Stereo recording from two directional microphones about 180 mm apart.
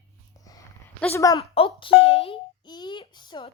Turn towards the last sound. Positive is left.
turn(degrees=25)  # may be behind; listen again after turning